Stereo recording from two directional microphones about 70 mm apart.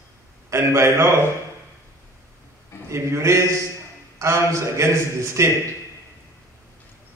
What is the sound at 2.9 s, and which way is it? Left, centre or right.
A man's voice, right.